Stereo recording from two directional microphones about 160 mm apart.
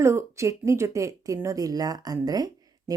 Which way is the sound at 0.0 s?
15° right (ahead or behind).